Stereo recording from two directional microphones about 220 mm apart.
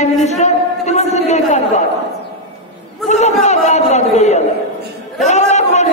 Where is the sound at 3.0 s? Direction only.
30° left (ahead or behind).